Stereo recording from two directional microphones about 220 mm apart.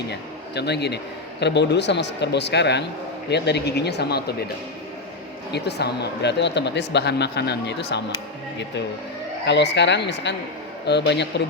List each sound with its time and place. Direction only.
0.1 s speech: 50° left (ahead or behind)
5.5 s speech: 50° left (ahead or behind)
9.5 s speech: 50° left (ahead or behind)